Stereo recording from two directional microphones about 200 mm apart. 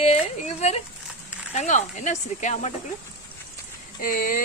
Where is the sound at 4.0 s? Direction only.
45° left (ahead or behind).